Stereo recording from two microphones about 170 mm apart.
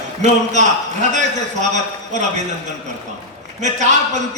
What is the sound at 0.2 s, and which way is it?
Speech, 45° right (ahead or behind).